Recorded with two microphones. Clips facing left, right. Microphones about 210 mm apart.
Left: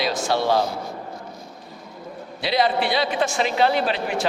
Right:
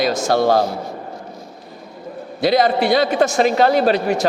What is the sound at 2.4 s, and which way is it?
A man's voice, 45° right (ahead or behind).